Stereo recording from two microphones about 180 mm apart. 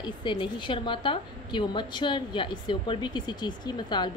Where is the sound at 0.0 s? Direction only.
25° left (ahead or behind).